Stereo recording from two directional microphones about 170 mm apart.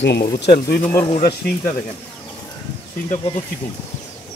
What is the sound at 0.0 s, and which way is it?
Speech, 80° left.